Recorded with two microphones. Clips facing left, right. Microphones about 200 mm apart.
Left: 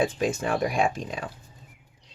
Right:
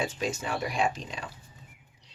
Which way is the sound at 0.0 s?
55° left (ahead or behind).